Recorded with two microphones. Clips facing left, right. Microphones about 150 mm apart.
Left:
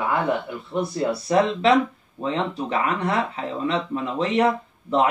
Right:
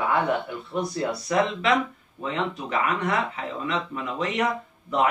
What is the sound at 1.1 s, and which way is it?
Speech, 30° left (ahead or behind).